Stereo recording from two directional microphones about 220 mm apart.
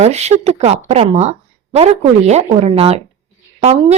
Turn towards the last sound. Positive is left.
turn(degrees=-30)  # may be behind; listen again after turning